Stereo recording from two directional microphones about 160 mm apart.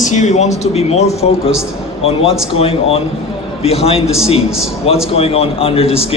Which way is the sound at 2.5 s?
35° left (ahead or behind).